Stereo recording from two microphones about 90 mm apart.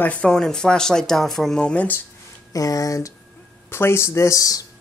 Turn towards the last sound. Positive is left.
turn(degrees=40)  # may be behind; listen again after turning